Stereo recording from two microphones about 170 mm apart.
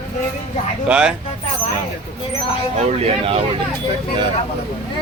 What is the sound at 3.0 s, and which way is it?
Speech, 35° right (ahead or behind).